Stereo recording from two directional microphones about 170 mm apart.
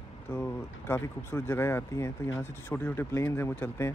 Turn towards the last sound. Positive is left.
turn(degrees=15)  # may be behind; listen again after turning